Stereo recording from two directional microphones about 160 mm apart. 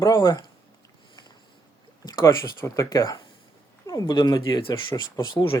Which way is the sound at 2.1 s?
25° left (ahead or behind).